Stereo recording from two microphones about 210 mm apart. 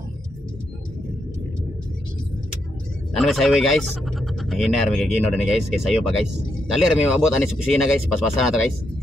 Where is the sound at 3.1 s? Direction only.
Centre (ahead or behind).